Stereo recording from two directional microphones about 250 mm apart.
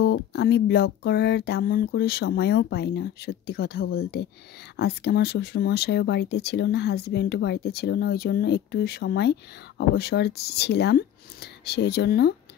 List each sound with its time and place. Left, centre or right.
0.0 s speech: left